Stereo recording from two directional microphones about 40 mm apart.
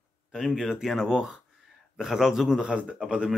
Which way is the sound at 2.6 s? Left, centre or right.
Right.